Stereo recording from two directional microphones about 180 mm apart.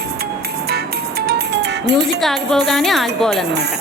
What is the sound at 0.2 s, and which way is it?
Music, 60° right (ahead or behind).